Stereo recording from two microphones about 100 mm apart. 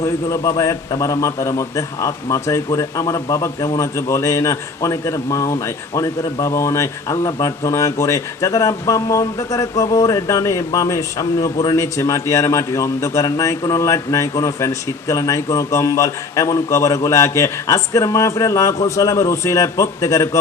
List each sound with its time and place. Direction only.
0.0 s a man's voice: 35° left (ahead or behind)